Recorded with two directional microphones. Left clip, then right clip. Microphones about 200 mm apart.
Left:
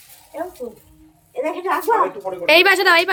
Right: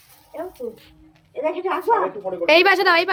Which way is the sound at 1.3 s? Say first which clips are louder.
Left 1 dB; 40° right (ahead or behind).